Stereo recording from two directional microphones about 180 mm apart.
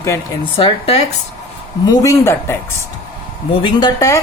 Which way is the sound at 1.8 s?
20° left (ahead or behind).